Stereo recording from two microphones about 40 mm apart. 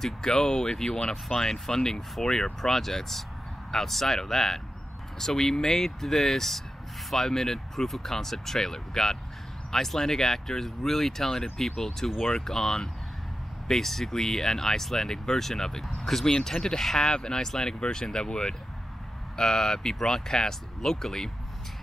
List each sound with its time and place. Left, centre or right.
0.0 s speech: centre